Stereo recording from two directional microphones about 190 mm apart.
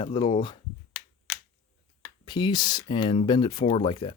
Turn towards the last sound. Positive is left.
turn(degrees=25)  # may be behind; listen again after turning